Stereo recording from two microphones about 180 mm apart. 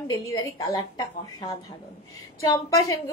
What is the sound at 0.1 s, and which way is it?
Speech, 20° left (ahead or behind).